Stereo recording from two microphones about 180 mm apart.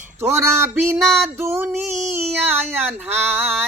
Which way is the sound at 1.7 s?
Centre (ahead or behind).